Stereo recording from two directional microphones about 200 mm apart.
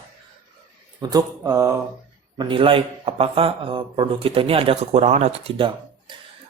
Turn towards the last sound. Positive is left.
turn(degrees=-25)  # may be behind; listen again after turning